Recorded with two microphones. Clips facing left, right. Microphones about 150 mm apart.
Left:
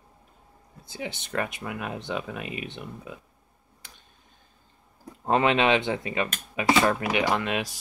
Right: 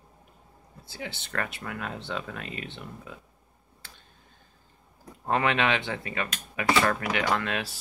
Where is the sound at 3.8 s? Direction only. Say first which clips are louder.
Right 1 dB; 15° left (ahead or behind).